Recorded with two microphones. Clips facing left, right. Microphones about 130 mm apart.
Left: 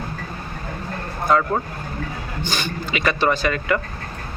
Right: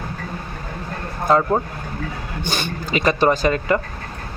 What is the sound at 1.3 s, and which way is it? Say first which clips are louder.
Speech: right 2 dB; 30° right (ahead or behind).